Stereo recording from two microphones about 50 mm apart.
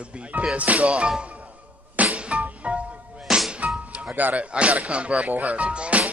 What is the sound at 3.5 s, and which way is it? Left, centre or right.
Speech, right.